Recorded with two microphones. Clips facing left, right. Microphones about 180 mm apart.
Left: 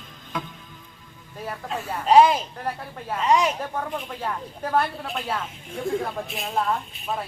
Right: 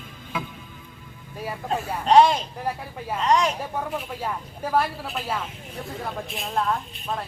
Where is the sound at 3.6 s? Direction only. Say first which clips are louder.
Even; 5° right (ahead or behind).